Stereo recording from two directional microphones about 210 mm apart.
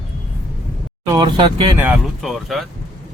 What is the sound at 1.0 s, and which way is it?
Speech, 20° right (ahead or behind).